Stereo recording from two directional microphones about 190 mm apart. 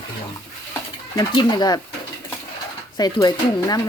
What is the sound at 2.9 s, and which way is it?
Speech, 20° left (ahead or behind).